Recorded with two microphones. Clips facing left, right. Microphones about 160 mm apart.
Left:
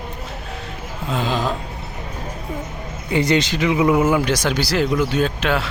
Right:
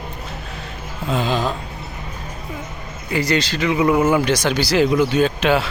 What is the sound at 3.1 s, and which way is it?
Speech, 25° left (ahead or behind).